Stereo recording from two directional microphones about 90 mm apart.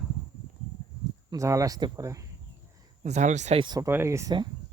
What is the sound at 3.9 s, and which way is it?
Speech, 30° right (ahead or behind).